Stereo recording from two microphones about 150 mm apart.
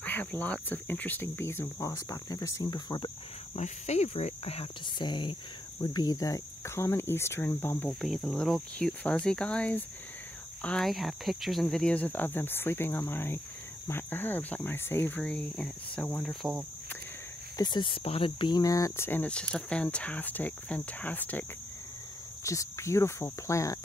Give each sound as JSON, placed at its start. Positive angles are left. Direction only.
{"t": 0.0, "sound": "speech", "side_deg": 10}
{"t": 3.5, "sound": "speech", "side_deg": 50}
{"t": 8.0, "sound": "cricket", "side_deg": 0}
{"t": 9.1, "sound": "speech", "side_deg": 5}
{"t": 17.6, "sound": "speech", "side_deg": 30}